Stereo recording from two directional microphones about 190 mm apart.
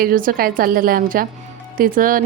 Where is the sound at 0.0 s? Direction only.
50° right (ahead or behind).